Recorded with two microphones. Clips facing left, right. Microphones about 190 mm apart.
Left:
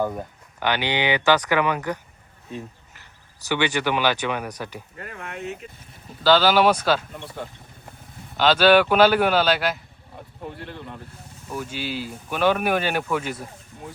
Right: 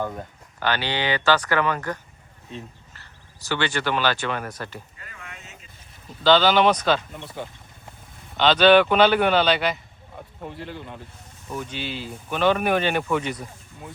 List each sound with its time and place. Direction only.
0.0 s speech: 10° left (ahead or behind)
2.5 s a sound: 15° left (ahead or behind)
3.5 s speech: 15° left (ahead or behind)
4.9 s vehicle: 55° left (ahead or behind)
6.2 s speech: 5° left (ahead or behind)